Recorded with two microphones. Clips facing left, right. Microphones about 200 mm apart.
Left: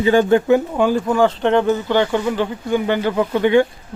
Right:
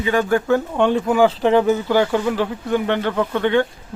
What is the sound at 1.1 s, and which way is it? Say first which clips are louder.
Speech: right 1 dB; 5° right (ahead or behind).